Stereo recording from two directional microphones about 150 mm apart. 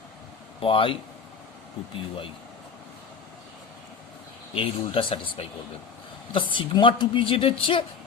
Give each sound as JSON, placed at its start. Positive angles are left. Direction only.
{"t": 0.6, "sound": "a woman's voice", "side_deg": 35}
{"t": 4.5, "sound": "a woman's voice", "side_deg": 35}